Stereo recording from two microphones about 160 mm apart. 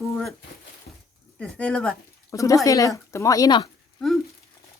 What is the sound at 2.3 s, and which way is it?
Speech, 20° left (ahead or behind).